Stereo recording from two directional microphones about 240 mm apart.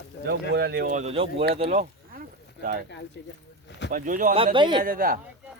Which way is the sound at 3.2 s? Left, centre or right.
Left.